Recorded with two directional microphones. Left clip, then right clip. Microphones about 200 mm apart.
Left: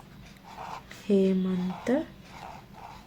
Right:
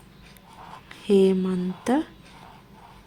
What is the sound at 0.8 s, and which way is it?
Speech, 30° right (ahead or behind).